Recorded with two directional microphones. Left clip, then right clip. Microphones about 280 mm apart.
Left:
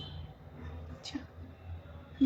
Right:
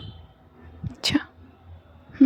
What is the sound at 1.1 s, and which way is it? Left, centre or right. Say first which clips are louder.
Whispering: right 17 dB; right.